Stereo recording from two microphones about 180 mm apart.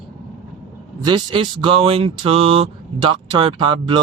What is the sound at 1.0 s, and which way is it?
Speech, 25° right (ahead or behind).